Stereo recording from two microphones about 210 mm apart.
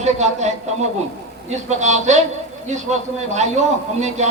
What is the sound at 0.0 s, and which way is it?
A man's voice, 35° right (ahead or behind).